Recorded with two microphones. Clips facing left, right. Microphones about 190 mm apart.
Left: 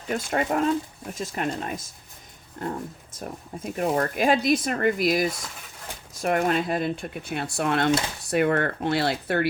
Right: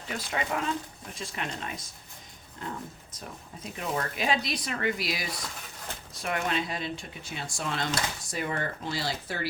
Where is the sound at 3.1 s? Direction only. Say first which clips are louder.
Left 10 dB; 50° left (ahead or behind).